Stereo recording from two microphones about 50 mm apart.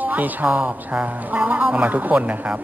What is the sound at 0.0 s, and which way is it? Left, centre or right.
A woman's voice, right.